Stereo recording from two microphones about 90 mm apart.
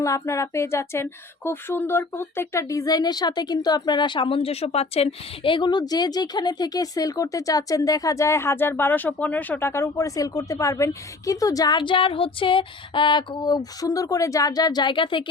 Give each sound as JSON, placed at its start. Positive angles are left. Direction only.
{"t": 0.0, "sound": "speech", "side_deg": 35}
{"t": 5.4, "sound": "speech", "side_deg": 65}
{"t": 10.2, "sound": "speech", "side_deg": 40}
{"t": 11.8, "sound": "a sound", "side_deg": 70}